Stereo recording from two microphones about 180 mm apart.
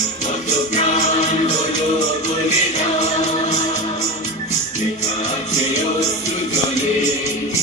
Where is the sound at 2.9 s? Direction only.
40° left (ahead or behind).